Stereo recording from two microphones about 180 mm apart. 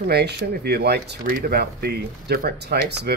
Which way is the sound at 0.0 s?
65° right (ahead or behind).